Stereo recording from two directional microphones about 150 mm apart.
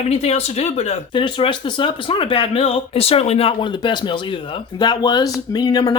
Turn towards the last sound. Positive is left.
turn(degrees=25)  # may be behind; listen again after turning